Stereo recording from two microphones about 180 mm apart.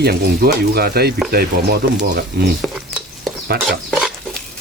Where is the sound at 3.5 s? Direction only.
60° right (ahead or behind).